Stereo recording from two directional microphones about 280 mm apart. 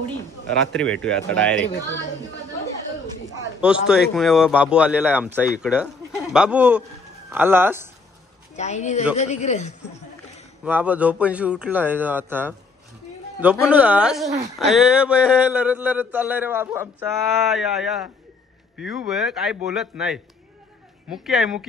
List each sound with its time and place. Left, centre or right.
0.7 s a man's voice: centre
3.8 s a man's voice: centre
8.5 s speech: left
10.6 s a man's voice: centre